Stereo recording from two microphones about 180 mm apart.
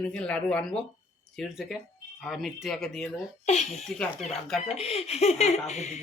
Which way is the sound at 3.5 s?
40° left (ahead or behind).